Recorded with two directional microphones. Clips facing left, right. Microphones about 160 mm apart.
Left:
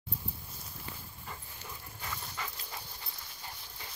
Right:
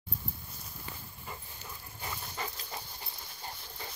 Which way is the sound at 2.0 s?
25° right (ahead or behind).